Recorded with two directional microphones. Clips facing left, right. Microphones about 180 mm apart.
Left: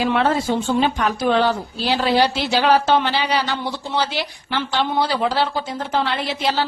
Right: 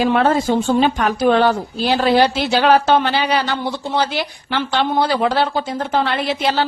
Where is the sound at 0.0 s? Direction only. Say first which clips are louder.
Right 3 dB; 45° right (ahead or behind).